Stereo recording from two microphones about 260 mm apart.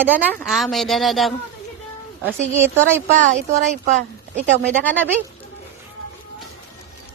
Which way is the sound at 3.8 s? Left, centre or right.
Right.